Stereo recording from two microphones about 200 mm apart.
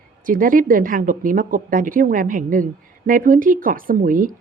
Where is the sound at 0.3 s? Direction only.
45° right (ahead or behind).